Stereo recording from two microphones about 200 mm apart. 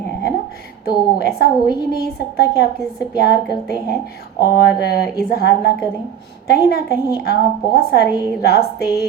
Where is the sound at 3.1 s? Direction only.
50° left (ahead or behind).